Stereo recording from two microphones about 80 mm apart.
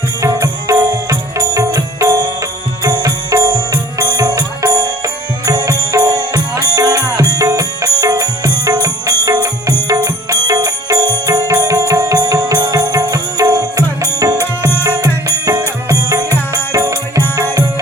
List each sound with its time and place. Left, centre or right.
0.2 s music: right